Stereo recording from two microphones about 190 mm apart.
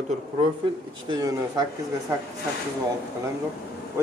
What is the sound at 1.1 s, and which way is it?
Speech, 20° right (ahead or behind).